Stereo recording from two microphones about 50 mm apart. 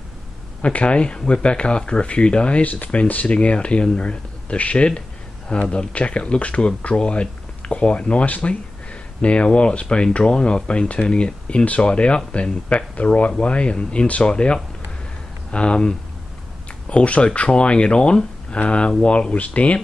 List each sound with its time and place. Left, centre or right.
0.6 s speech: left